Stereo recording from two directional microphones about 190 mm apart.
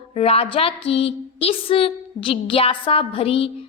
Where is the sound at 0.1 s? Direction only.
30° left (ahead or behind).